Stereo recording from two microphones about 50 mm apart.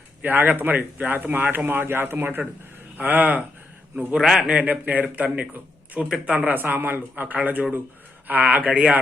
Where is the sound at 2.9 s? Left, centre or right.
Right.